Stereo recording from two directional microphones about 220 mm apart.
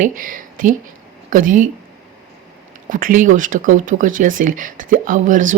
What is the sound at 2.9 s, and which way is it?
Speech, 35° right (ahead or behind).